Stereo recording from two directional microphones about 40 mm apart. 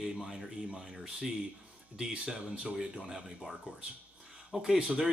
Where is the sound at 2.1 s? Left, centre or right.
Right.